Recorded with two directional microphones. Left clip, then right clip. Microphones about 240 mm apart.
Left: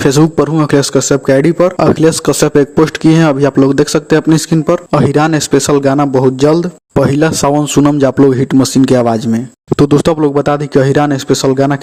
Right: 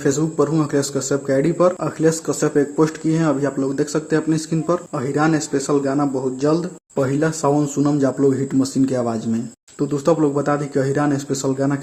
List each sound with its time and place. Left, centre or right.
0.0 s speech: left